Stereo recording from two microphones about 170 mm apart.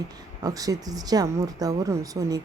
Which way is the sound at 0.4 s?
20° right (ahead or behind).